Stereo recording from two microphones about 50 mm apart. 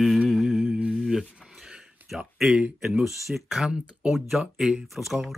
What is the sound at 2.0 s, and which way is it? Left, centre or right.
Speech, centre.